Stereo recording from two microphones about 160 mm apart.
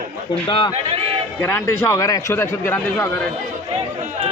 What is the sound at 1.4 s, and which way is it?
Speech, 15° left (ahead or behind).